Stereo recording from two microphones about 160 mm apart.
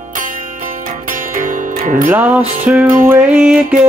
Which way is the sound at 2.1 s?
10° right (ahead or behind).